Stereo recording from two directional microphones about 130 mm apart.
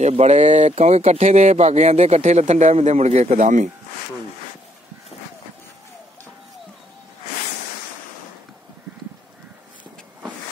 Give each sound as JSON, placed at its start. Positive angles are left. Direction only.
{"t": 0.0, "sound": "speech", "side_deg": -60}